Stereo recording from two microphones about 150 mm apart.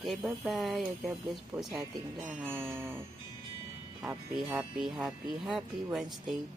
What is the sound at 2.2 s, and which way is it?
Music, 10° right (ahead or behind).